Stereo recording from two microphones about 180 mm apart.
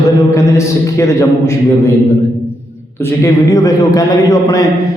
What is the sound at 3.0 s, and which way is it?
A man's voice, 15° left (ahead or behind).